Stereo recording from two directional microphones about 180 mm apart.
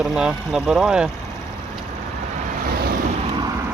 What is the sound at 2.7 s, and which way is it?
Vehicle, 60° right (ahead or behind).